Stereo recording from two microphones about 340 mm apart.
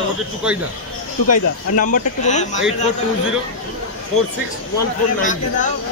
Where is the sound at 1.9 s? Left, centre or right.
Left.